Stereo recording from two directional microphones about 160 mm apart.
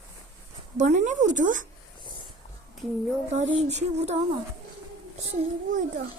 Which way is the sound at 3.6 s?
45° right (ahead or behind).